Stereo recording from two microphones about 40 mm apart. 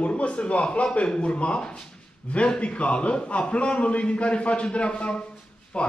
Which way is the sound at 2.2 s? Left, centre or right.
Left.